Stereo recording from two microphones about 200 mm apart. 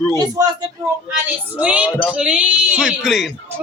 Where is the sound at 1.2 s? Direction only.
5° right (ahead or behind).